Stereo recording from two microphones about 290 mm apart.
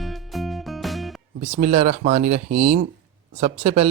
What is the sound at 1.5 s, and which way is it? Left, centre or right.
Speech, right.